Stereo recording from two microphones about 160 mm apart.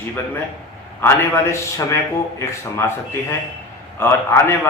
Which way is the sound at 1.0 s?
15° left (ahead or behind).